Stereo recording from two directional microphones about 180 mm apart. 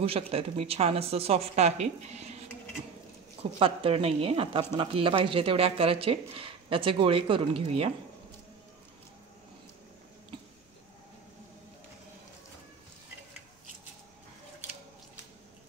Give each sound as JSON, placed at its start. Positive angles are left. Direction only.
{"t": 0.0, "sound": "a woman's voice", "side_deg": -35}
{"t": 3.5, "sound": "a woman's voice", "side_deg": -30}